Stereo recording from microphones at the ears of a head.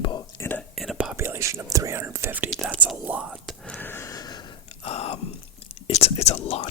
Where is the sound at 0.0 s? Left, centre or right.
Left.